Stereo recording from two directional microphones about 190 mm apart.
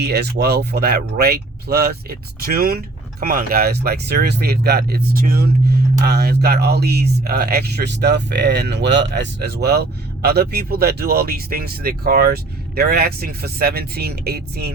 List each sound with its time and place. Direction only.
0.0 s speech: 60° right (ahead or behind)